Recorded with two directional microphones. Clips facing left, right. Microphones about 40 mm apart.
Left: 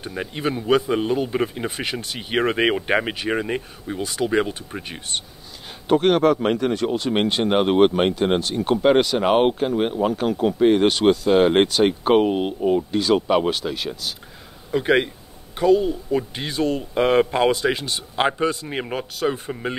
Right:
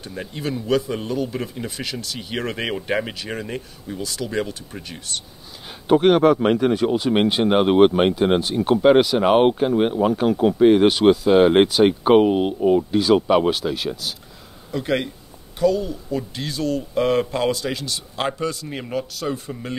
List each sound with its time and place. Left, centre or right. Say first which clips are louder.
0.0 s speech: left 3 dB; left
5.9 s a man's voice: right 2 dB; centre
14.7 s speech: left 4 dB; left